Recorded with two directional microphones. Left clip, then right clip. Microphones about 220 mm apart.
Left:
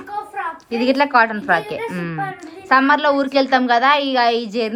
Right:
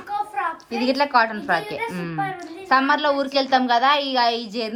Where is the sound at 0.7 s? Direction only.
10° right (ahead or behind).